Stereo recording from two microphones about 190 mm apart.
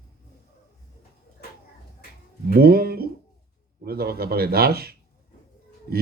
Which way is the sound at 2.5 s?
55° right (ahead or behind).